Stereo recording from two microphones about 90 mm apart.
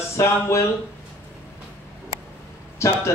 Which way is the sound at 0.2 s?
35° left (ahead or behind).